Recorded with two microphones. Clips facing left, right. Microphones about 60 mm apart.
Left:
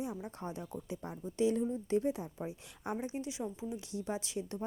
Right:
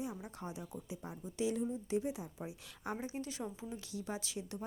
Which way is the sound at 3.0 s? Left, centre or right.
Left.